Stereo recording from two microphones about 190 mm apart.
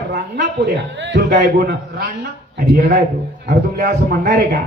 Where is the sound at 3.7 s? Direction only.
55° right (ahead or behind).